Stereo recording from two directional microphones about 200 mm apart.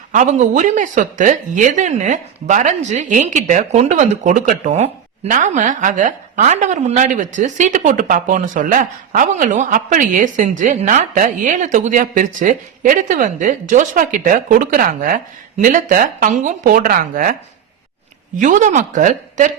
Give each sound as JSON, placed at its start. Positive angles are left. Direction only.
{"t": 0.1, "sound": "speech", "side_deg": -40}
{"t": 18.3, "sound": "speech", "side_deg": -40}